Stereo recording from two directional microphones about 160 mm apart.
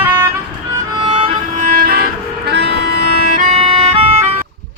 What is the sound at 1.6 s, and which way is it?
Music, 60° right (ahead or behind).